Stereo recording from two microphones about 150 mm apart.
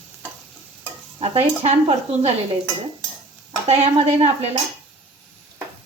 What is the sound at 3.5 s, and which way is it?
Speech, 45° right (ahead or behind).